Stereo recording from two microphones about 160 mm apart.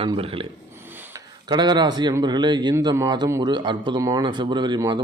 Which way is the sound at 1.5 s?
25° right (ahead or behind).